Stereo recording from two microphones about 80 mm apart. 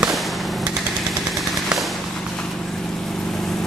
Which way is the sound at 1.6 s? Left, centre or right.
Centre.